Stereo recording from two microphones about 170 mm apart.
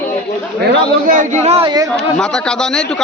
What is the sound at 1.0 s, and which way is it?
Speech, 50° right (ahead or behind).